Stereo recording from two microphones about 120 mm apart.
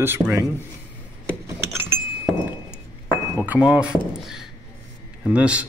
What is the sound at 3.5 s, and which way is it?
Speech, 10° right (ahead or behind).